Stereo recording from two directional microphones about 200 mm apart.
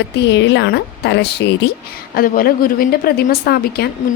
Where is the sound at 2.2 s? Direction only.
45° left (ahead or behind).